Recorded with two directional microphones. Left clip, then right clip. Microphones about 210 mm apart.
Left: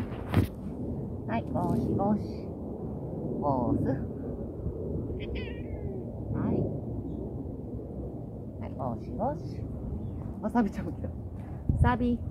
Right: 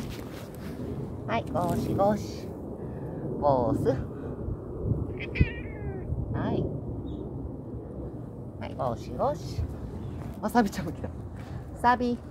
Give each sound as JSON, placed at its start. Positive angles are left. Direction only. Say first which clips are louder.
{"t": 1.3, "sound": "speech", "louder": "right 3 dB", "side_deg": -35}
{"t": 3.4, "sound": "speech", "louder": "right 5 dB", "side_deg": -40}
{"t": 6.3, "sound": "thunder", "louder": "right 1 dB", "side_deg": -40}
{"t": 8.7, "sound": "speech", "louder": "right 5 dB", "side_deg": -35}
{"t": 10.4, "sound": "speech", "louder": "right 4 dB", "side_deg": -45}